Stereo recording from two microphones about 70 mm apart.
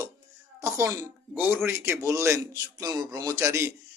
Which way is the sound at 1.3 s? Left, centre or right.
Right.